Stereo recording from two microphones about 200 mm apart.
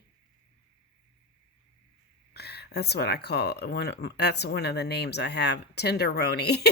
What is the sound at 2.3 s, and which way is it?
Speech, 55° left (ahead or behind).